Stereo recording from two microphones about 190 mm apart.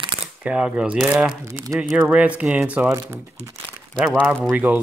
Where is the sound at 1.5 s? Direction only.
15° right (ahead or behind).